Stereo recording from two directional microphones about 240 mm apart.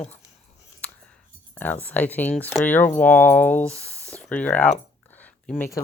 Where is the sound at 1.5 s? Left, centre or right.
Centre.